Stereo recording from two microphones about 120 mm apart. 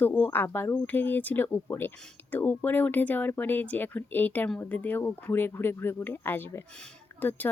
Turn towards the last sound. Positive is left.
turn(degrees=15)  # may be behind; listen again after turning